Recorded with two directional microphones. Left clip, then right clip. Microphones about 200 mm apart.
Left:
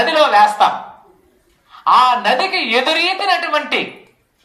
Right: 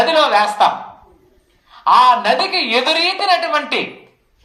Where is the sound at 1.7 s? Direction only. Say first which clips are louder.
Right 1 dB; 15° right (ahead or behind).